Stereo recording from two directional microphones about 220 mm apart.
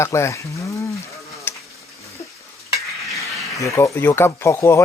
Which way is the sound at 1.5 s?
10° left (ahead or behind).